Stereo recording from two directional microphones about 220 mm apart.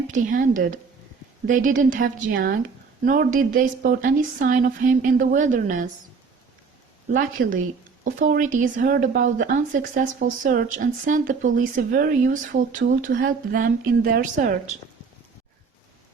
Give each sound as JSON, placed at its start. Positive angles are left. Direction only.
{"t": 0.1, "sound": "speech", "side_deg": -35}
{"t": 7.1, "sound": "speech", "side_deg": -40}